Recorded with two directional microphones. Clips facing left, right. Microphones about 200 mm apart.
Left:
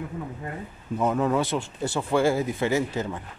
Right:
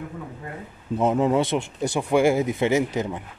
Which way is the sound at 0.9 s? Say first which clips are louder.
Right 3 dB; 25° right (ahead or behind).